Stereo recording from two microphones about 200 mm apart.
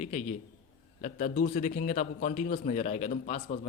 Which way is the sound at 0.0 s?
35° left (ahead or behind).